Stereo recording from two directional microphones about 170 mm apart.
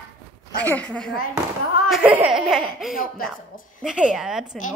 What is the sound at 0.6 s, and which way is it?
Speech, 10° left (ahead or behind).